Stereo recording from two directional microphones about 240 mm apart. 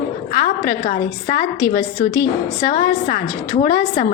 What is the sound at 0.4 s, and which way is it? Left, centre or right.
A woman's voice, left.